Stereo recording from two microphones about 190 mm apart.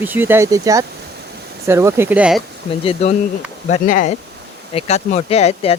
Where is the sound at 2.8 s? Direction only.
35° left (ahead or behind).